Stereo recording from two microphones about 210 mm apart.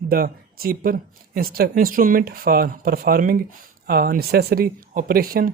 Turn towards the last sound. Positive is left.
turn(degrees=-45)  # may be behind; listen again after turning